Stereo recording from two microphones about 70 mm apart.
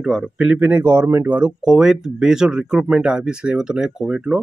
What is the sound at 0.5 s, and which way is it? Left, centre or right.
Speech, right.